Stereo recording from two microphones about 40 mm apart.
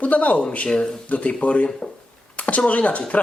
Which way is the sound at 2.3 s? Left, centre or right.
Left.